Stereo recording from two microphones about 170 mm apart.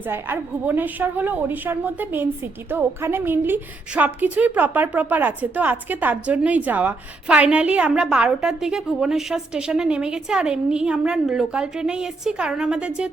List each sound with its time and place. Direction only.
0.0 s a woman's voice: 10° right (ahead or behind)